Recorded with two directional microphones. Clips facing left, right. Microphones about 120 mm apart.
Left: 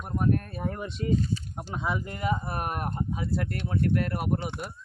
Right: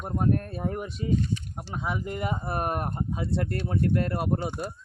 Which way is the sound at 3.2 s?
30° right (ahead or behind).